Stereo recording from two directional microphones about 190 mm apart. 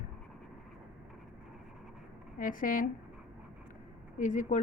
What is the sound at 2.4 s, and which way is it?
Speech, 45° left (ahead or behind).